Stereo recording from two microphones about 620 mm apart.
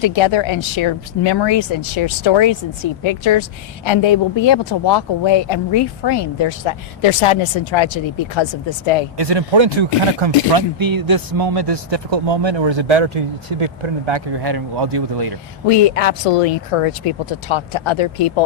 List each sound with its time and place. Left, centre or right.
0.0 s speech: left
9.1 s speech: right
10.8 s speech: right
15.6 s speech: left
17.1 s speech: left